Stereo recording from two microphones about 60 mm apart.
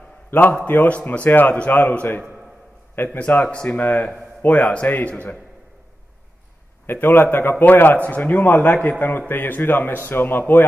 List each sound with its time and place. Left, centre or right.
0.3 s a man's voice: left
6.9 s a man's voice: left